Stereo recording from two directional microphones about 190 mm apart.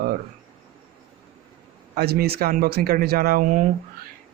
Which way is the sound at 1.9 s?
55° right (ahead or behind).